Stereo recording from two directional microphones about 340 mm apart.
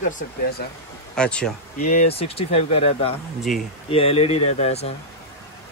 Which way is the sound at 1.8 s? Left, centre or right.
Centre.